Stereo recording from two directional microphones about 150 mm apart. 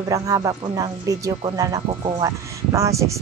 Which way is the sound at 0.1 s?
25° right (ahead or behind).